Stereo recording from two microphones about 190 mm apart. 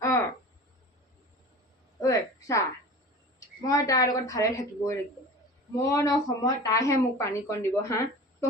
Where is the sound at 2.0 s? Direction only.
15° left (ahead or behind).